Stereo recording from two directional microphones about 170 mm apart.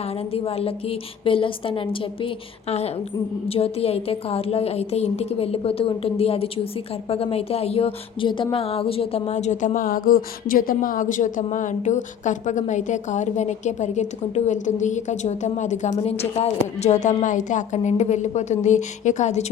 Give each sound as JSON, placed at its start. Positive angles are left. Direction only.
{"t": 0.3, "sound": "a woman's voice", "side_deg": 35}